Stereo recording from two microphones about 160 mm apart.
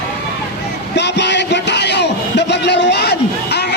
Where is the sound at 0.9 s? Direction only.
90° left.